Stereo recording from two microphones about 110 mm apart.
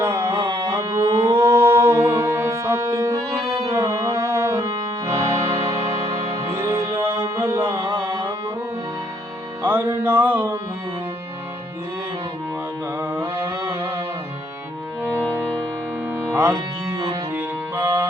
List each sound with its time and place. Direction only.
0.0 s carnatic music: 25° right (ahead or behind)
9.6 s music: 20° right (ahead or behind)
9.9 s a sound: 20° right (ahead or behind)
13.0 s music: 20° right (ahead or behind)
16.1 s music: 20° right (ahead or behind)